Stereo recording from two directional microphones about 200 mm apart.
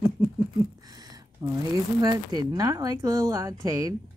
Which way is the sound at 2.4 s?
20° right (ahead or behind).